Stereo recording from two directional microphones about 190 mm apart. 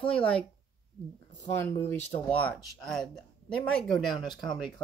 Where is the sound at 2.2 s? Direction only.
5° left (ahead or behind).